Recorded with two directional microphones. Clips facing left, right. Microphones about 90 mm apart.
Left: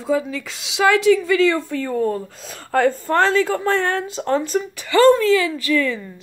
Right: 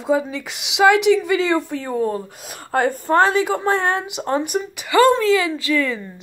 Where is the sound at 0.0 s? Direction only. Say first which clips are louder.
Right 1 dB; 20° right (ahead or behind).